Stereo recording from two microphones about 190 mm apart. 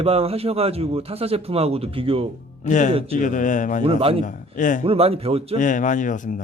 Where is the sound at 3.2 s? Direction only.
40° left (ahead or behind).